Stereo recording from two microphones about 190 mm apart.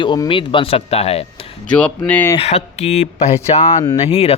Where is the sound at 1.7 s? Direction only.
5° left (ahead or behind).